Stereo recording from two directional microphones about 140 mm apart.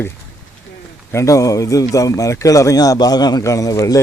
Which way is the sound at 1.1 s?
20° left (ahead or behind).